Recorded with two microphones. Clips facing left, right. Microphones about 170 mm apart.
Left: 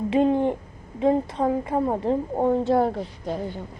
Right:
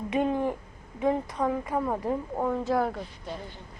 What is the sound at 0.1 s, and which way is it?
A child's voice, 30° left (ahead or behind).